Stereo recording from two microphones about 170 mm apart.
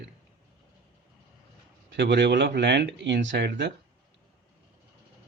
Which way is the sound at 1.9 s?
90° right.